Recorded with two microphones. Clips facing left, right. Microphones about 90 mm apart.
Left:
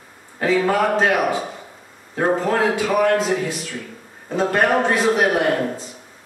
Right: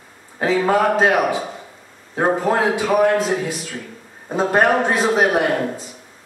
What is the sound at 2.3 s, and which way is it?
Speech, 20° right (ahead or behind).